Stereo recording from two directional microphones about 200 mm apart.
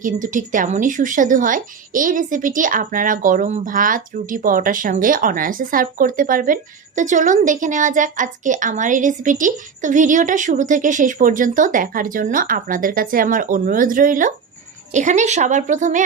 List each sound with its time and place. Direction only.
0.0 s speech: 40° right (ahead or behind)